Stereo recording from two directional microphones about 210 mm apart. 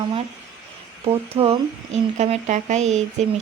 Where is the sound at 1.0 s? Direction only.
25° right (ahead or behind).